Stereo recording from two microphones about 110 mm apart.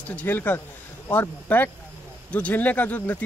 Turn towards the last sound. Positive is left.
turn(degrees=15)  # may be behind; listen again after turning